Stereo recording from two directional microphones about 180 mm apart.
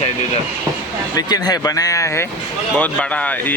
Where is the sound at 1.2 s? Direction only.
20° left (ahead or behind).